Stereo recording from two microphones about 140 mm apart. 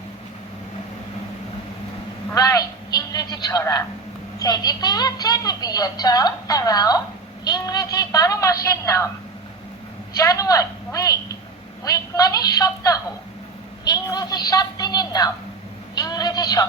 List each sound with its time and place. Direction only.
2.3 s a sound: 25° left (ahead or behind)
4.4 s speech: 30° left (ahead or behind)
10.2 s a man's voice: 25° left (ahead or behind)